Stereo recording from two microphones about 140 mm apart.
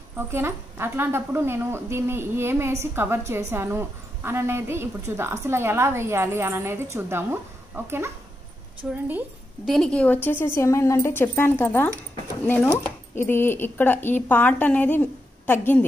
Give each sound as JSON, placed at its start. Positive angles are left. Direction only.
{"t": 0.3, "sound": "a woman's voice", "side_deg": -15}
{"t": 9.7, "sound": "speech", "side_deg": 5}